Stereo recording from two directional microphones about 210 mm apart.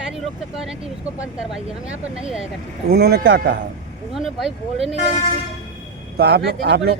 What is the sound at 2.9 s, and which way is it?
Speech, 50° right (ahead or behind).